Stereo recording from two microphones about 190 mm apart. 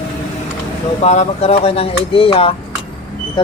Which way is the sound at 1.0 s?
35° left (ahead or behind).